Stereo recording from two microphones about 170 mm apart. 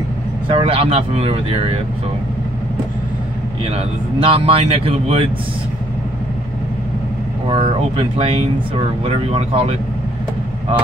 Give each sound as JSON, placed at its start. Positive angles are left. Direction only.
{"t": 0.5, "sound": "speech", "side_deg": -35}
{"t": 3.7, "sound": "speech", "side_deg": -35}
{"t": 7.4, "sound": "speech", "side_deg": -35}